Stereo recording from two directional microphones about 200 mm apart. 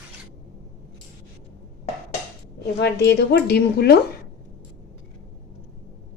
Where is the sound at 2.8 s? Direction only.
55° left (ahead or behind).